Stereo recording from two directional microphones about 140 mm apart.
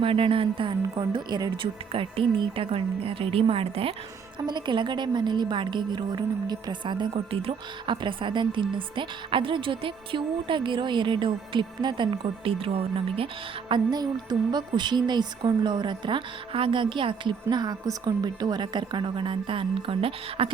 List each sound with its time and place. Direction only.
0.0 s a woman's voice: 40° right (ahead or behind)
4.4 s a woman's voice: 30° right (ahead or behind)
13.7 s a woman's voice: 30° right (ahead or behind)